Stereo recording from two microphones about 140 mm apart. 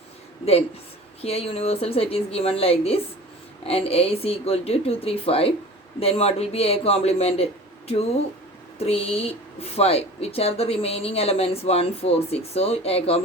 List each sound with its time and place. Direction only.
1.2 s speech: 45° left (ahead or behind)